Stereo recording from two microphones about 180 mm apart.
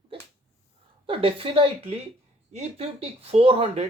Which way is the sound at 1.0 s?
30° right (ahead or behind).